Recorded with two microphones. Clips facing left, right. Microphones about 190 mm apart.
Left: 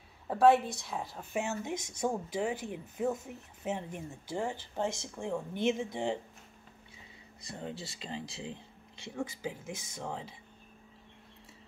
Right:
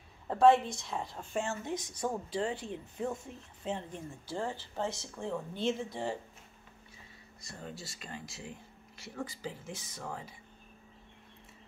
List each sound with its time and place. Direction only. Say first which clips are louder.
0.3 s a woman's voice: even; 5° left (ahead or behind)
7.5 s speech: left 4 dB; 25° left (ahead or behind)
9.1 s speech: left 3 dB; 15° left (ahead or behind)